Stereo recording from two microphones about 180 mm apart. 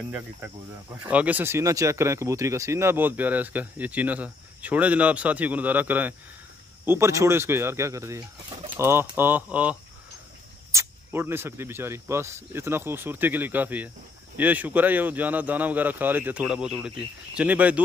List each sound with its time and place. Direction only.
0.1 s speech: 10° right (ahead or behind)